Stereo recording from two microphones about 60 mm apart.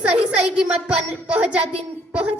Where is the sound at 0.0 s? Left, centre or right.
Centre.